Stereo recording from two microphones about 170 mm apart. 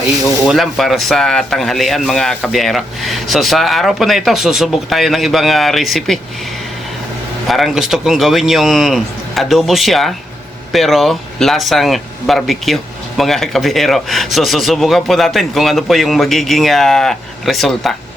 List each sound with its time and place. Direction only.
0.4 s speech: centre (ahead or behind)
7.4 s speech: centre (ahead or behind)